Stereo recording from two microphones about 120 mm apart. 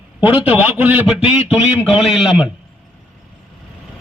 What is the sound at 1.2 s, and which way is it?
Speech, 60° left (ahead or behind).